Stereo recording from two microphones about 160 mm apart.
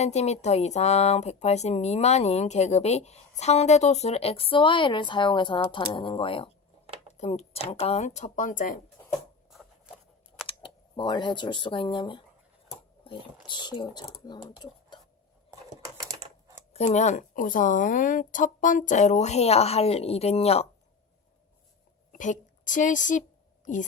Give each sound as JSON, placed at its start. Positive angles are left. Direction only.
{"t": 0.0, "sound": "a woman's voice", "side_deg": 45}
{"t": 9.5, "sound": "a sound", "side_deg": 0}
{"t": 10.4, "sound": "speech", "side_deg": 30}
{"t": 13.5, "sound": "speech", "side_deg": 30}
{"t": 16.2, "sound": "typing", "side_deg": -5}
{"t": 16.7, "sound": "a woman's voice", "side_deg": 45}
{"t": 22.1, "sound": "a woman's voice", "side_deg": 55}